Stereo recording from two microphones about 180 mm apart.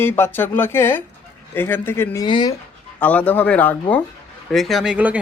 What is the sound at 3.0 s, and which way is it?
Speech, 10° left (ahead or behind).